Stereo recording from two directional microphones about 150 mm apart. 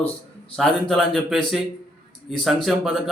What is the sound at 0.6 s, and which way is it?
Speech, centre (ahead or behind).